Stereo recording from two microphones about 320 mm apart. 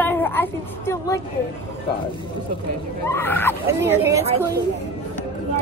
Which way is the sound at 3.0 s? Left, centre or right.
Centre.